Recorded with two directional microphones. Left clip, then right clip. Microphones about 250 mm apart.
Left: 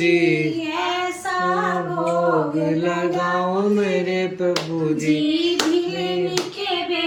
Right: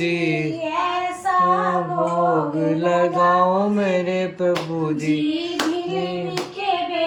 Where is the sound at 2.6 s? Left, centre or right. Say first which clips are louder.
Right 3 dB; centre.